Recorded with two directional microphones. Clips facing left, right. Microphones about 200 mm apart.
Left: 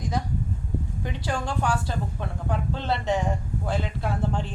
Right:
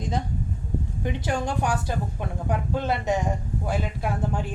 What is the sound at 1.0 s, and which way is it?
A woman's voice, 20° right (ahead or behind).